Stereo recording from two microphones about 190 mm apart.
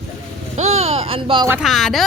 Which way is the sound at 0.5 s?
35° right (ahead or behind).